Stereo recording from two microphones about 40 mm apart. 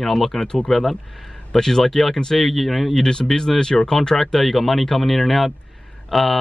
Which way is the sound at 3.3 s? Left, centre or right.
Centre.